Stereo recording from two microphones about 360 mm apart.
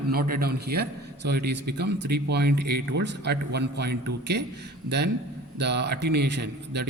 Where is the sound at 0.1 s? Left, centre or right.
Right.